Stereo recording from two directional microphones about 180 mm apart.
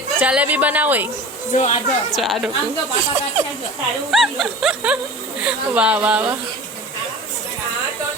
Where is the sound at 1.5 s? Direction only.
40° left (ahead or behind).